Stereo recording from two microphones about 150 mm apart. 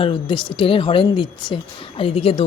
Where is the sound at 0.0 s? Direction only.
35° left (ahead or behind).